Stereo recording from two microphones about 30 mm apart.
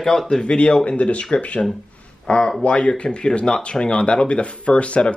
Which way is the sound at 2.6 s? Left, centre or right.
Left.